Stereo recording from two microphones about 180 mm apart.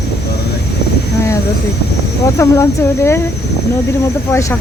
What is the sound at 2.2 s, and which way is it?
Speech, 15° left (ahead or behind).